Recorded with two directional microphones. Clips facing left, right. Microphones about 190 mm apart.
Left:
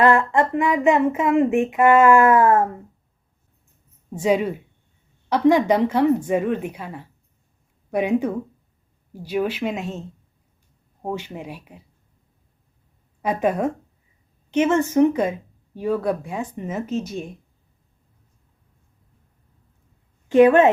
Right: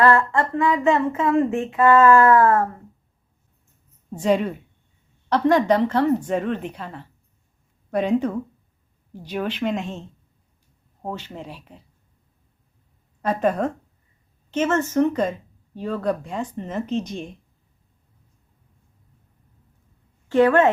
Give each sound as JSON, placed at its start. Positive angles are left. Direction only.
{"t": 0.0, "sound": "speech", "side_deg": 20}
{"t": 4.1, "sound": "speech", "side_deg": 10}
{"t": 11.0, "sound": "speech", "side_deg": 10}
{"t": 13.2, "sound": "speech", "side_deg": 10}
{"t": 20.2, "sound": "speech", "side_deg": 15}